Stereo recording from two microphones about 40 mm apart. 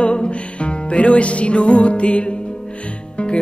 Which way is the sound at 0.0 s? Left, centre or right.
Left.